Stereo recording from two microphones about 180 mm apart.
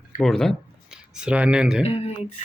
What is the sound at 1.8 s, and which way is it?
Speech, 35° left (ahead or behind).